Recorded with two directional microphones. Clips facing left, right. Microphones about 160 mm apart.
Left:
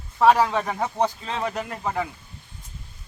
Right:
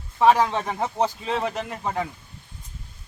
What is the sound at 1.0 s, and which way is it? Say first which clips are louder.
A man's voice: right 2 dB; 10° right (ahead or behind).